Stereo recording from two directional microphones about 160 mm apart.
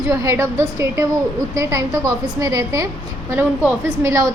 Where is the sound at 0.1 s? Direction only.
20° right (ahead or behind).